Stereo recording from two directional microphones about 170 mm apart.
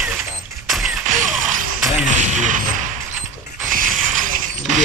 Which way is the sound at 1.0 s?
50° right (ahead or behind).